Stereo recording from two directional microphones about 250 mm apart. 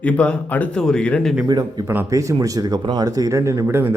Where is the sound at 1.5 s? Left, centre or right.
Centre.